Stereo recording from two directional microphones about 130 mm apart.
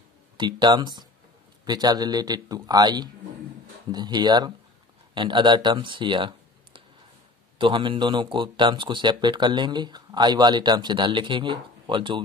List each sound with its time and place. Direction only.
0.4 s speech: 35° right (ahead or behind)